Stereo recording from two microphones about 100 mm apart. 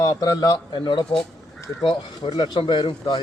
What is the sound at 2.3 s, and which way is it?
Speech, 45° left (ahead or behind).